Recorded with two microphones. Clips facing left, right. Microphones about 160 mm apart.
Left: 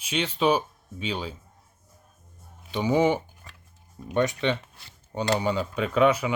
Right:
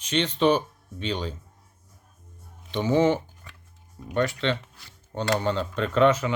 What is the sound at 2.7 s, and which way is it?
Speech, 15° left (ahead or behind).